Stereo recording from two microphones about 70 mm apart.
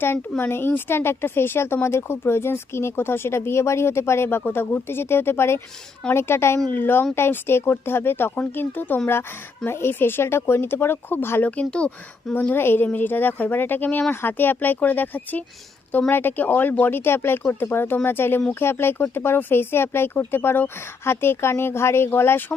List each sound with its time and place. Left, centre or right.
0.0 s speech: left
11.6 s speech: centre
12.3 s speech: left